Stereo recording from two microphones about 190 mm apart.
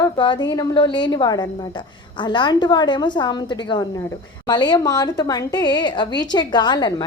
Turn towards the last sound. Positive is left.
turn(degrees=20)  # may be behind; listen again after turning